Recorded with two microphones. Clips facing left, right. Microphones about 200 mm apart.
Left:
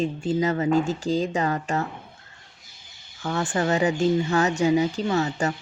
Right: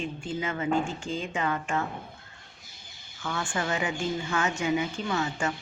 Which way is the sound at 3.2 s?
40° left (ahead or behind).